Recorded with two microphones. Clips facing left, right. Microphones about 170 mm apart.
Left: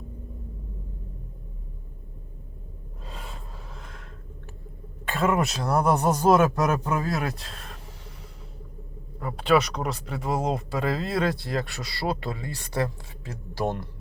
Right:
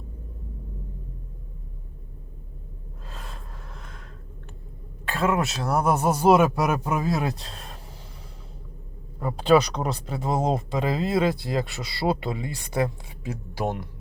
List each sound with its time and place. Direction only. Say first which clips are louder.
3.2 s gasp: left 1 dB; centre (ahead or behind)
5.0 s speech: even; centre (ahead or behind); by 7.3 s 20° right (ahead or behind)
9.6 s speech: right 2 dB; centre (ahead or behind)
9.8 s speech: right 2 dB; 30° right (ahead or behind); by 13.8 s 15° right (ahead or behind)